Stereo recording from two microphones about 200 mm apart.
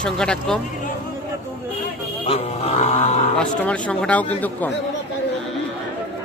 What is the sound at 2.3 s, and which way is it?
Speech, 30° left (ahead or behind).